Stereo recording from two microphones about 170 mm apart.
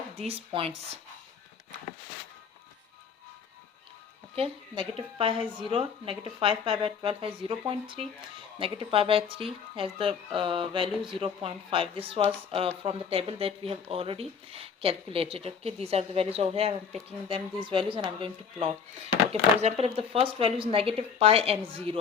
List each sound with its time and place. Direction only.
0.3 s speech: 35° right (ahead or behind)
4.4 s speech: 35° right (ahead or behind)
10.3 s a sound: 30° right (ahead or behind)
11.2 s speech: 30° right (ahead or behind)